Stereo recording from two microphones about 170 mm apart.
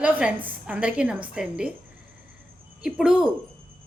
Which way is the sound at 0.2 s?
5° right (ahead or behind).